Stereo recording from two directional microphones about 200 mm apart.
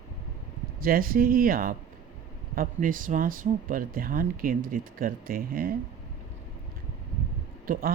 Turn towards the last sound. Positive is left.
turn(degrees=-45)  # may be behind; listen again after turning